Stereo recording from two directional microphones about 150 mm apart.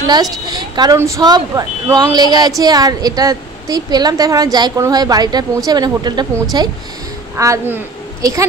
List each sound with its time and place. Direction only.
0.0 s a woman's voice: 25° right (ahead or behind)